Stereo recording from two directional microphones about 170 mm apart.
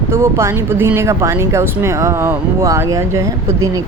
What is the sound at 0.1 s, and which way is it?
Speech, 15° right (ahead or behind).